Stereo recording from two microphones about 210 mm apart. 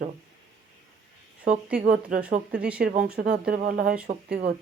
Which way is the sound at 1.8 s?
45° right (ahead or behind).